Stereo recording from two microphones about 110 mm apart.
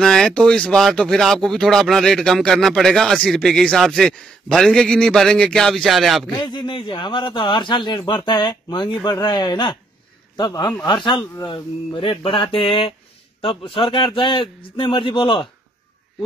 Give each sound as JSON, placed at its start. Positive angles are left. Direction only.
{"t": 0.0, "sound": "speech", "side_deg": 5}
{"t": 6.3, "sound": "a man's voice", "side_deg": 45}